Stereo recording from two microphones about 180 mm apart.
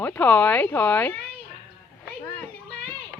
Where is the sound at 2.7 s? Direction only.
10° left (ahead or behind).